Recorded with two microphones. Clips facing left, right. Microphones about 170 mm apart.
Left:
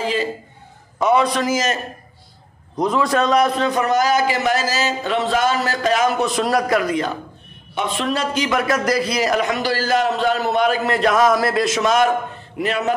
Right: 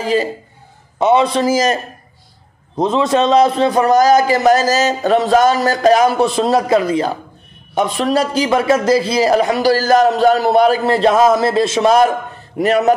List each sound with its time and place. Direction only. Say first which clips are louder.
0.0 s speech: right 5 dB; 40° right (ahead or behind)
0.9 s a man's voice: right 4 dB; 25° right (ahead or behind)